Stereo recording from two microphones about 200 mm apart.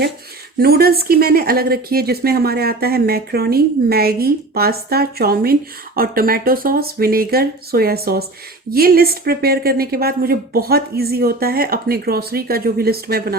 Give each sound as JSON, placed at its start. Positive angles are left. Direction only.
{"t": 0.6, "sound": "a woman's voice", "side_deg": -50}